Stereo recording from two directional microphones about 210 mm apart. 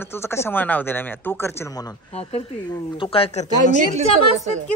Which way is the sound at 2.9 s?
25° left (ahead or behind).